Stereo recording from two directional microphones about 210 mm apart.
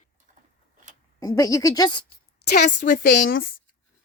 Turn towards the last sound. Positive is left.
turn(degrees=45)  # may be behind; listen again after turning